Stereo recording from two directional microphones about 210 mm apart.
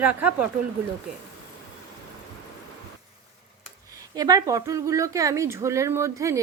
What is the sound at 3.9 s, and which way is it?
A woman's voice, 15° right (ahead or behind).